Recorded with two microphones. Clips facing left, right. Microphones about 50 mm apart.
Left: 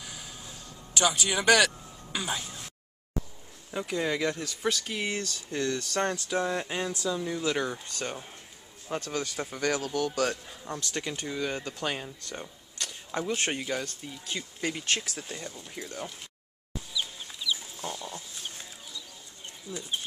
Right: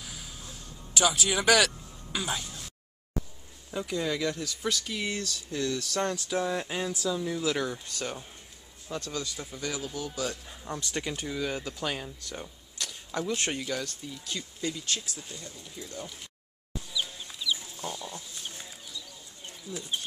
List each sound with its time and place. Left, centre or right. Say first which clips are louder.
0.0 s music: left 1 dB; centre
0.9 s speech: even; centre
2.4 s a sound: left 1 dB; centre
3.7 s speech: left 1 dB; left
6.1 s speech: left 1 dB; centre
8.8 s speech: left 3 dB; left
10.4 s speech: even; centre
11.2 s speech: even; centre
13.1 s speech: left 1 dB; centre
14.6 s speech: left 4 dB; left
16.9 s chicken: even; centre
19.7 s speech: even; centre